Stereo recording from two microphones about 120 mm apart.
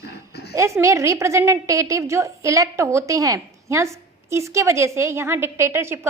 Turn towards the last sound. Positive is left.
turn(degrees=-20)  # may be behind; listen again after turning